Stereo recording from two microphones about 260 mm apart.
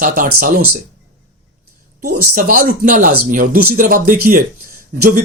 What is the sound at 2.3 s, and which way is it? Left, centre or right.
Speech, right.